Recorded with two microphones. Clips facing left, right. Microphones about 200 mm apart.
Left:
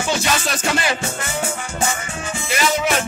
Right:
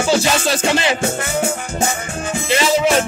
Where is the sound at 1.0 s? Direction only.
55° right (ahead or behind).